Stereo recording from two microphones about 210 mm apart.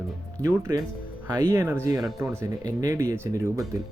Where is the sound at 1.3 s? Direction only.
15° right (ahead or behind).